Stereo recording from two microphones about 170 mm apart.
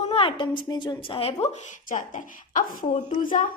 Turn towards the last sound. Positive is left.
turn(degrees=50)  # may be behind; listen again after turning